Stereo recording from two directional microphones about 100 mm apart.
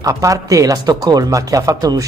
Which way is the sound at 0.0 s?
35° right (ahead or behind).